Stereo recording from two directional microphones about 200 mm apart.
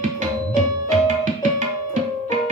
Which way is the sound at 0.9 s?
40° right (ahead or behind).